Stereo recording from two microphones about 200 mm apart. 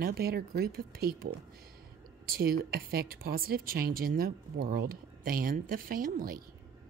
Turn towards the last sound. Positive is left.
turn(degrees=-45)  # may be behind; listen again after turning